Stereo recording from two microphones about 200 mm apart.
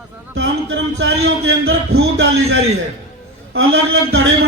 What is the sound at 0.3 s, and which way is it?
A man's voice, 80° right.